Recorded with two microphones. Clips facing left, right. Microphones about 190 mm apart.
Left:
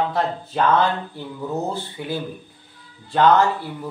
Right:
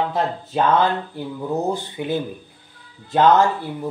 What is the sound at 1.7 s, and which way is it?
Speech, 20° right (ahead or behind).